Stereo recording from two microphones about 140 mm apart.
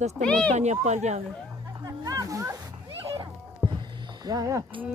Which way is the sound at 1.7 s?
25° right (ahead or behind).